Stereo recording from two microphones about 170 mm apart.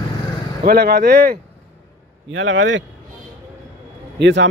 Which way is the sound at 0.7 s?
65° right (ahead or behind).